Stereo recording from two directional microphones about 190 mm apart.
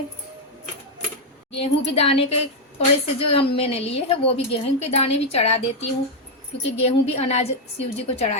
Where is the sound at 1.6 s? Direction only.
30° left (ahead or behind).